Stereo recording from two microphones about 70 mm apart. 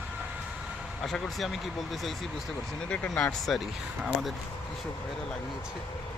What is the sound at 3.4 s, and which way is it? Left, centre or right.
Speech, centre.